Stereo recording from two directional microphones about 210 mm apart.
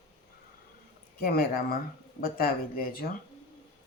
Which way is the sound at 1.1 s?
45° left (ahead or behind).